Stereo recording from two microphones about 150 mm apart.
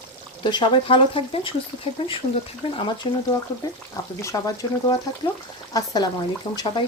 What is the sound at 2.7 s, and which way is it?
Speech, 35° left (ahead or behind).